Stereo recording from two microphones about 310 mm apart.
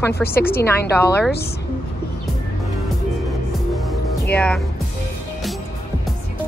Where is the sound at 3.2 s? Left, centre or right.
Centre.